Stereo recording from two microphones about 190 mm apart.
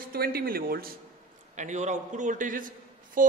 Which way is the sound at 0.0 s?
55° right (ahead or behind).